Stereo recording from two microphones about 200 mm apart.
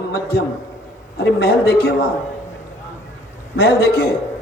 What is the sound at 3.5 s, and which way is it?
Speech, 55° left (ahead or behind).